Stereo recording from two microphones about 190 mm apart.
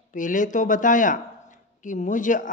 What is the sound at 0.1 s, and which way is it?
A man's voice, 45° left (ahead or behind).